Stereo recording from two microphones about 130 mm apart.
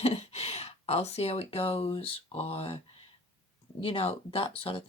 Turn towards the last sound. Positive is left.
turn(degrees=45)  # may be behind; listen again after turning